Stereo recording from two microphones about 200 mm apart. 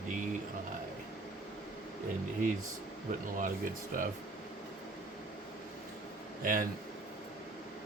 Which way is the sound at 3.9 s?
40° right (ahead or behind).